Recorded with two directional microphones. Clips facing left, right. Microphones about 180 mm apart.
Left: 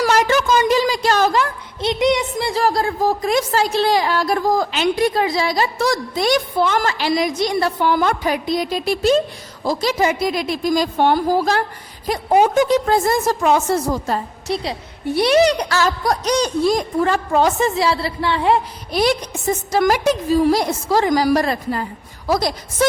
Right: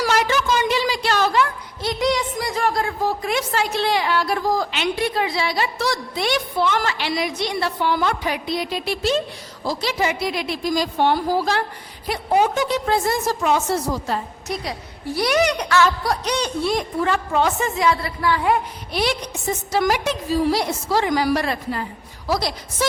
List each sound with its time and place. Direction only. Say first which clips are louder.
0.0 s a sound: left 4 dB; 45° left (ahead or behind)
1.8 s a woman's voice: left 4 dB; 20° left (ahead or behind); by 14.2 s 50° left (ahead or behind)
14.4 s a woman's voice: left 4 dB; 30° left (ahead or behind)
18.9 s a woman's voice: left 6 dB; 45° left (ahead or behind)